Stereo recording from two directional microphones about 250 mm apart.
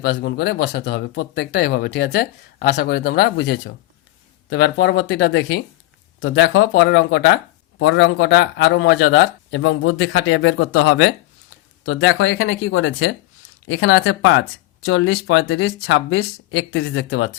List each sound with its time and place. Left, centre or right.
0.0 s a man's voice: left